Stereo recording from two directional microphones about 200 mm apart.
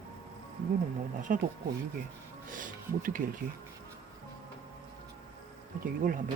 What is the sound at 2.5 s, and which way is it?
Speech, 40° right (ahead or behind).